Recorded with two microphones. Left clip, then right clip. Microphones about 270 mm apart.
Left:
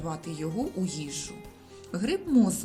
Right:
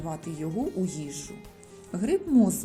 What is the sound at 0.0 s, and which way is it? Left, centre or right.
Speech, centre.